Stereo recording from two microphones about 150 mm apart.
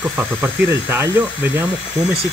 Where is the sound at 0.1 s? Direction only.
15° right (ahead or behind).